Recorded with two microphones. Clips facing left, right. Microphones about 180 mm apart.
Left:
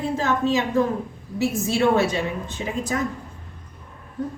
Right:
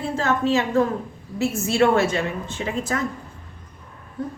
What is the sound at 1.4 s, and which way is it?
A woman's voice, 15° left (ahead or behind).